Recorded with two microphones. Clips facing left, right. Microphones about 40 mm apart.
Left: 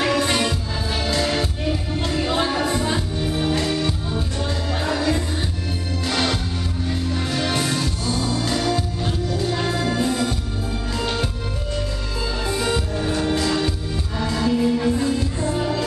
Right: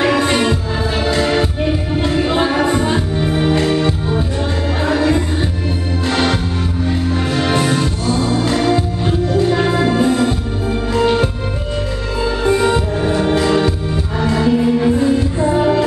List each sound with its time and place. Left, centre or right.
0.0 s music: right
12.4 s music: right